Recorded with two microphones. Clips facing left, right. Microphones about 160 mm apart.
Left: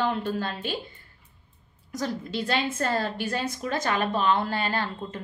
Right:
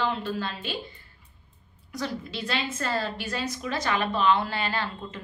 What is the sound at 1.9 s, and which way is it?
A woman's voice, 45° left (ahead or behind).